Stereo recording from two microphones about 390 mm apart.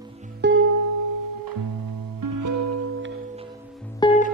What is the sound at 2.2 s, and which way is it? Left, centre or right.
Music, right.